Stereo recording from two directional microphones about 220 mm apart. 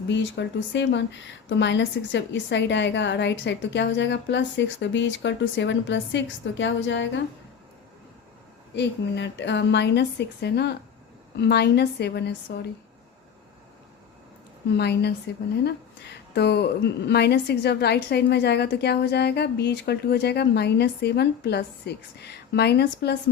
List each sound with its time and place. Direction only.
0.1 s a woman's voice: 55° left (ahead or behind)
8.7 s a woman's voice: 50° left (ahead or behind)
14.8 s a woman's voice: 50° left (ahead or behind)